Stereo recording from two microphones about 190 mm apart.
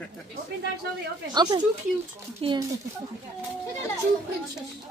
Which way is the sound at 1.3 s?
20° right (ahead or behind).